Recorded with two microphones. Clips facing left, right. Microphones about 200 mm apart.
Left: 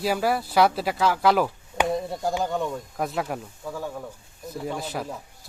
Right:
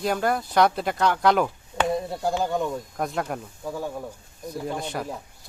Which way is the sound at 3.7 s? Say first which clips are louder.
Right 2 dB; 10° right (ahead or behind).